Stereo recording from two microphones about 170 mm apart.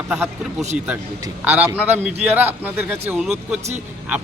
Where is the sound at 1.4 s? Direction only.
10° right (ahead or behind).